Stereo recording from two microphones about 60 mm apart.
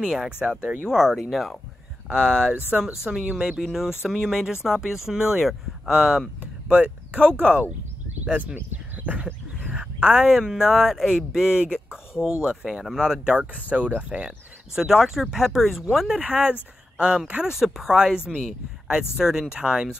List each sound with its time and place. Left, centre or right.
0.0 s speech: centre
11.4 s speech: centre
14.8 s speech: centre
16.2 s speech: centre